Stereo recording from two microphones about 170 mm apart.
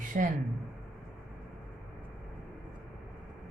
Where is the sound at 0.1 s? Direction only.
55° right (ahead or behind).